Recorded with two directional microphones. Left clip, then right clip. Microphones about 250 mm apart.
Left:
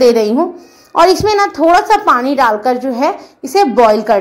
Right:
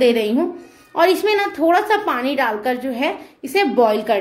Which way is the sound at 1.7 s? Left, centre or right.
Centre.